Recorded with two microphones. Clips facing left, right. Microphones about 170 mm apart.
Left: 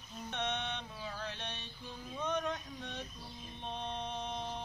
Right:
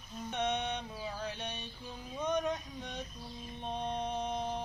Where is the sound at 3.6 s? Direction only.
10° right (ahead or behind).